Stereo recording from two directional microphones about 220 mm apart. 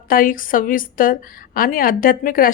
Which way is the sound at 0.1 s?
40° left (ahead or behind).